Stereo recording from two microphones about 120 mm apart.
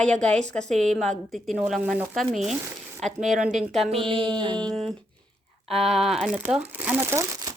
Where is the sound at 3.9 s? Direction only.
50° right (ahead or behind).